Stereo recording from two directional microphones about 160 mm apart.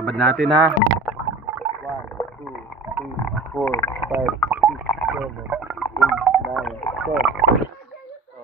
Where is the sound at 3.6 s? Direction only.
15° left (ahead or behind).